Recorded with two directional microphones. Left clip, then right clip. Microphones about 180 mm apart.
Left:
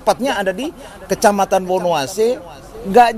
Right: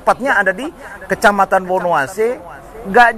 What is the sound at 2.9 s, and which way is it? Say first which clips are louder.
Speech: right 1 dB; 45° left (ahead or behind).